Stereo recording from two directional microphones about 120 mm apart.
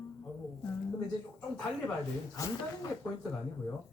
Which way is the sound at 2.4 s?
30° left (ahead or behind).